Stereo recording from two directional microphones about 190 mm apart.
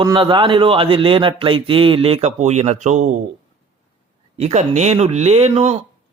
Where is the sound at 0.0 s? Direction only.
25° right (ahead or behind); by 3.2 s 40° right (ahead or behind).